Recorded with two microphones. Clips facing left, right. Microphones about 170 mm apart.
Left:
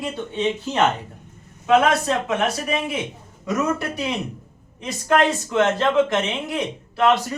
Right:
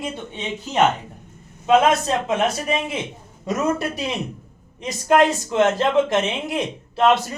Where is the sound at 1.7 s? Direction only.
20° right (ahead or behind).